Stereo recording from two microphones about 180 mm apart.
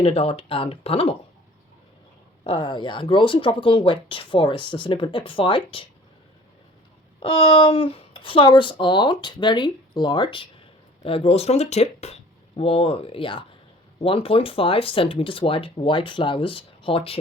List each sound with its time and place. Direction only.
0.0 s speech: 35° left (ahead or behind)
2.4 s speech: 25° left (ahead or behind)
7.2 s speech: 30° left (ahead or behind)